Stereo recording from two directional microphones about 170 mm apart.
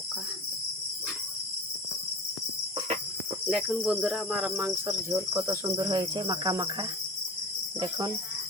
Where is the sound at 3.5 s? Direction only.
5° right (ahead or behind); by 8.1 s 25° right (ahead or behind).